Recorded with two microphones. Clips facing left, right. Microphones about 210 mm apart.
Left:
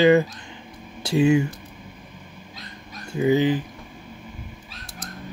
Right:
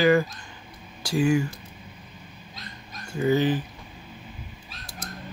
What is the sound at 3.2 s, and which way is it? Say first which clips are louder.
Speech: left 3 dB; 15° left (ahead or behind).